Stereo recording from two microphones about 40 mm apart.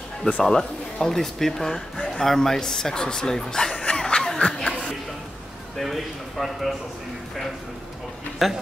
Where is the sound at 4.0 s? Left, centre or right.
Centre.